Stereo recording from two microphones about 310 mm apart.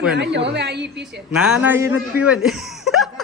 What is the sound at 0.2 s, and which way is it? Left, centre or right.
Speech, right.